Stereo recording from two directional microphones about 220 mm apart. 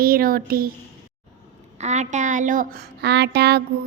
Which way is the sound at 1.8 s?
30° right (ahead or behind).